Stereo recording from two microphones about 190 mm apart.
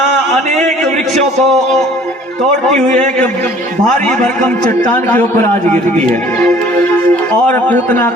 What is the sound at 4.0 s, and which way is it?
A man's voice, 5° left (ahead or behind).